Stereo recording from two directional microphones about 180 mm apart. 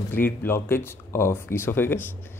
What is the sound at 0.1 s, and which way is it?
Speech, 10° left (ahead or behind).